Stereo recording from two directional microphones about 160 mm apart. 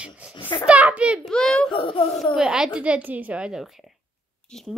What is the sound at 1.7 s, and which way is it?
Speech, 35° left (ahead or behind).